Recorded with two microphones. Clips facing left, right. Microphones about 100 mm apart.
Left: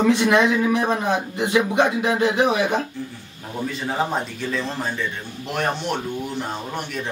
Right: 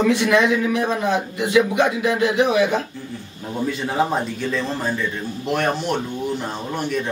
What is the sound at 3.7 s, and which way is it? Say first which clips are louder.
A man's voice: right 2 dB; centre (ahead or behind).